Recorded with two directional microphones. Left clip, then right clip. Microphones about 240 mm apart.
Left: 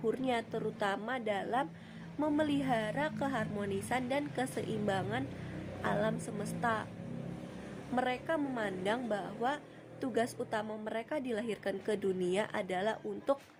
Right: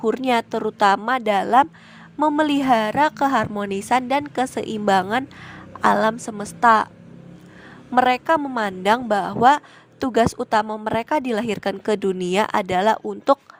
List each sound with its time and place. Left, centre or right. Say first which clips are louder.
0.0 s a woman's voice: right 14 dB; right
7.9 s a woman's voice: right 17 dB; right